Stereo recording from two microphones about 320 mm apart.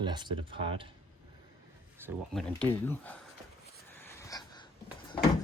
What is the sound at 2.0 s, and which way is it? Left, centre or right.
Speech, centre.